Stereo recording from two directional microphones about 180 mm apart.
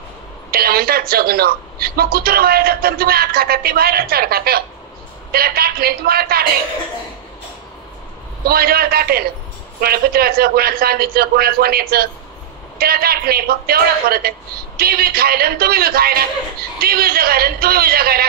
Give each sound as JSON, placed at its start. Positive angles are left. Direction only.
{"t": 0.5, "sound": "a woman's voice", "side_deg": -60}
{"t": 8.5, "sound": "a woman's voice", "side_deg": -60}